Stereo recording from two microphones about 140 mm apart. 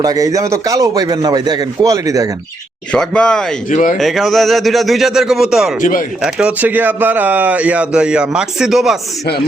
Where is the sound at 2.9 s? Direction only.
5° left (ahead or behind).